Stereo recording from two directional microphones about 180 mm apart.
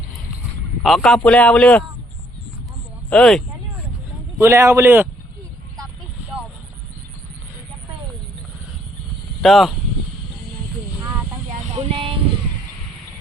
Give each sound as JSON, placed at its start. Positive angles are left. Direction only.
{"t": 0.8, "sound": "speech", "side_deg": 0}
{"t": 3.1, "sound": "speech", "side_deg": 5}
{"t": 4.4, "sound": "a man's voice", "side_deg": -15}
{"t": 9.4, "sound": "speech", "side_deg": 0}
{"t": 11.9, "sound": "a sound", "side_deg": -30}